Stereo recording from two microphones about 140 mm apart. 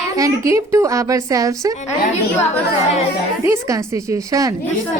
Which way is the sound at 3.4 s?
20° right (ahead or behind).